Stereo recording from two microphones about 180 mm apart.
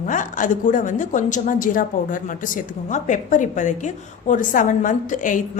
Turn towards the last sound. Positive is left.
turn(degrees=45)  # may be behind; listen again after turning